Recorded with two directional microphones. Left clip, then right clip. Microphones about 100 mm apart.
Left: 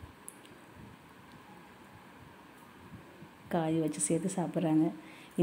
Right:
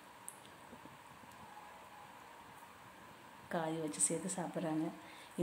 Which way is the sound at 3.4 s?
30° left (ahead or behind).